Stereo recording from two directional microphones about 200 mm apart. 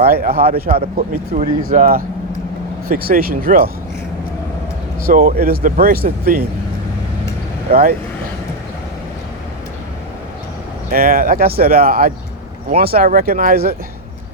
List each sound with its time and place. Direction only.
0.0 s speech: 50° right (ahead or behind)
0.8 s speech: 35° right (ahead or behind)
1.6 s speech: 45° right (ahead or behind)
5.0 s speech: 45° right (ahead or behind)
7.7 s speech: 45° right (ahead or behind)
10.9 s speech: 45° right (ahead or behind)